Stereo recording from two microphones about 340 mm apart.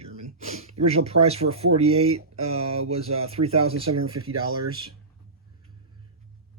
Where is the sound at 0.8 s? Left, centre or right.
Centre.